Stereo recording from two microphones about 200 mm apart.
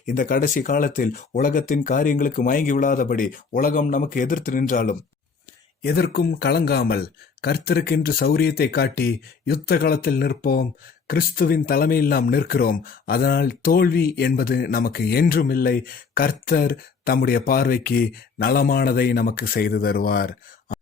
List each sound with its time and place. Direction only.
0.0 s speech: 40° left (ahead or behind)